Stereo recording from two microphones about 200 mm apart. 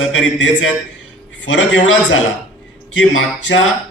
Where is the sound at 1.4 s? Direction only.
70° left (ahead or behind).